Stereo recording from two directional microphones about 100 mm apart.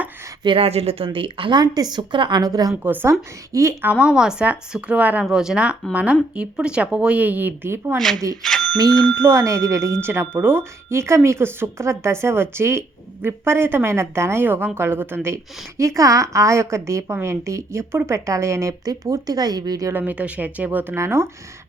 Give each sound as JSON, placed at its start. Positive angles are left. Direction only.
{"t": 0.4, "sound": "a woman's voice", "side_deg": -70}
{"t": 2.8, "sound": "a woman's voice", "side_deg": -20}
{"t": 4.0, "sound": "speech", "side_deg": -5}
{"t": 7.9, "sound": "speech", "side_deg": 5}
{"t": 8.4, "sound": "a sound", "side_deg": 5}
{"t": 9.2, "sound": "a woman's voice", "side_deg": -30}
{"t": 19.9, "sound": "a woman's voice", "side_deg": -20}